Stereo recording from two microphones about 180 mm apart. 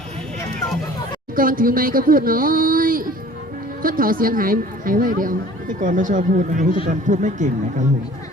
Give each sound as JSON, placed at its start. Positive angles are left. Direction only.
{"t": 1.4, "sound": "speech", "side_deg": -50}